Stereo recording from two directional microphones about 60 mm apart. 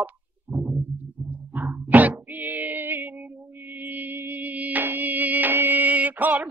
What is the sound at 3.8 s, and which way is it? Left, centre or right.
Music, right.